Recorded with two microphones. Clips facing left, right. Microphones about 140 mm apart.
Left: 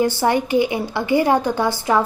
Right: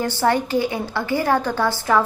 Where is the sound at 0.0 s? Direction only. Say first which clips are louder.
Left 2 dB; 15° left (ahead or behind).